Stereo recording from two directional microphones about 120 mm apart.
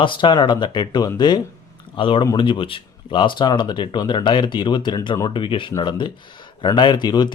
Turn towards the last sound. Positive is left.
turn(degrees=35)  # may be behind; listen again after turning